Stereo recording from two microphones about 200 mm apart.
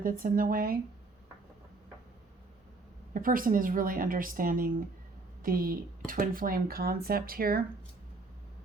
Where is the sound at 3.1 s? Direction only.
45° right (ahead or behind).